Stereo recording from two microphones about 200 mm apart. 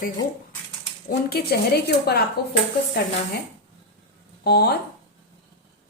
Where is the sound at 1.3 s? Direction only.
50° left (ahead or behind).